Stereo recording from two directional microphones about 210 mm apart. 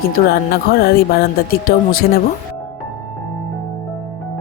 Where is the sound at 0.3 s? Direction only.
45° left (ahead or behind).